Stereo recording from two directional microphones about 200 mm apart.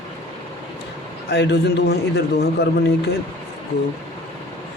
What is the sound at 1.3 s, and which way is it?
Speech, 55° left (ahead or behind).